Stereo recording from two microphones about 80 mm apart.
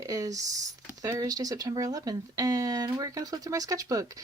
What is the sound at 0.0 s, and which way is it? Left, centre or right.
Speech, right.